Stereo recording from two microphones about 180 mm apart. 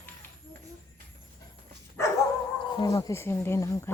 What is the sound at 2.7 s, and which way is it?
Speech, 20° left (ahead or behind).